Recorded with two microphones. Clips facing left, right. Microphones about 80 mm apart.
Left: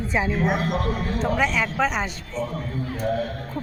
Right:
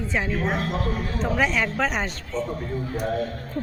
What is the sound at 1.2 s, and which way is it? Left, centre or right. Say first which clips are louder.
Speech: even; centre.